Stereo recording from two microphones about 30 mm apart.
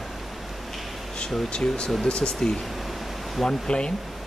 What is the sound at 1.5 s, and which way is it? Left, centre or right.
Speech, left.